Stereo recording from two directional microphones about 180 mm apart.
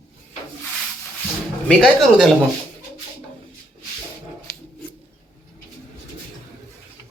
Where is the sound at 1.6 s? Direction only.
Centre (ahead or behind).